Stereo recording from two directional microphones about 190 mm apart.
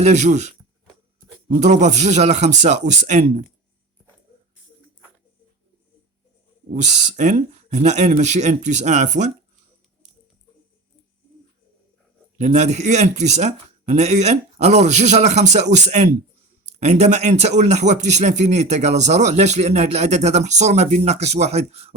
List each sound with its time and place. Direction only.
0.0 s a man's voice: 40° right (ahead or behind)
6.7 s a man's voice: 40° right (ahead or behind)
12.4 s a man's voice: 35° right (ahead or behind)